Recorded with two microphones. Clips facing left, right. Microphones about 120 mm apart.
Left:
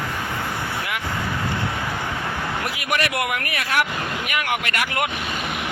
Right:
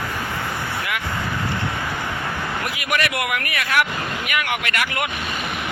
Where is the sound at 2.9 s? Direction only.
35° left (ahead or behind).